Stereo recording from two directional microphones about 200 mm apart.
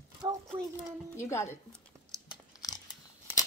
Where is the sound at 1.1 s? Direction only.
15° left (ahead or behind).